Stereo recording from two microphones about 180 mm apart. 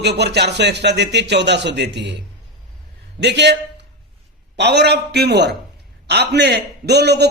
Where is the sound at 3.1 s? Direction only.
70° right (ahead or behind).